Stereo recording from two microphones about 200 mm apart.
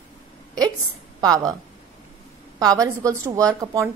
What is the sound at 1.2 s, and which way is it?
Speech, 20° right (ahead or behind).